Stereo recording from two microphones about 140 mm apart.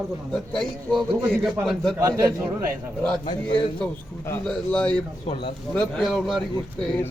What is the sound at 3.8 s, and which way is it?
A man's voice, 10° left (ahead or behind).